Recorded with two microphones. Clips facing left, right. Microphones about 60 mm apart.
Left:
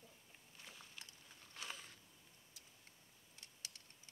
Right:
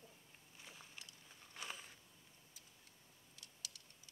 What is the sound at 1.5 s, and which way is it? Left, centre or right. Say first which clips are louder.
Biting: right 1 dB; centre.